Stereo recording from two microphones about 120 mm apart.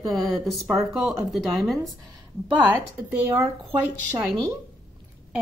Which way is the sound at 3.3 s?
15° right (ahead or behind).